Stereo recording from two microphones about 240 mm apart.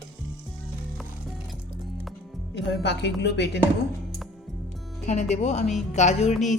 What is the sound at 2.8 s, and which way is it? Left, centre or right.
Speech, left.